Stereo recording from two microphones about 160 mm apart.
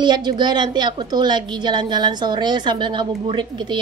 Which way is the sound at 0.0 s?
30° right (ahead or behind).